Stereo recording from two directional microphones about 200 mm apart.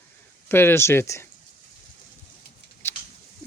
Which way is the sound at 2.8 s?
10° left (ahead or behind).